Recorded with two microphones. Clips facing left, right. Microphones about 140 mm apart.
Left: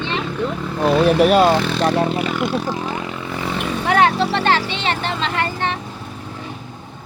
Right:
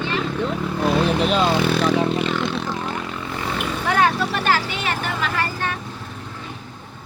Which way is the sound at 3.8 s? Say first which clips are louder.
Left 4 dB; 25° left (ahead or behind).